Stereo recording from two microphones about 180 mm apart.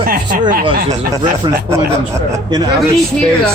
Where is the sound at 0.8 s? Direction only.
20° right (ahead or behind).